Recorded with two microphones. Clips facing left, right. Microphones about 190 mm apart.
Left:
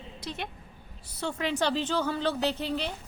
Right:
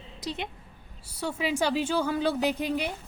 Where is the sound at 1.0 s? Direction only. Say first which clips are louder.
Right 1 dB; 10° right (ahead or behind).